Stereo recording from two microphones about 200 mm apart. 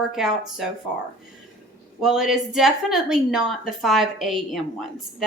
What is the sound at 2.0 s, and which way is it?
Speech, 5° right (ahead or behind).